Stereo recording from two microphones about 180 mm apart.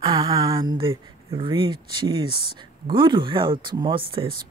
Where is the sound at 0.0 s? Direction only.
20° right (ahead or behind).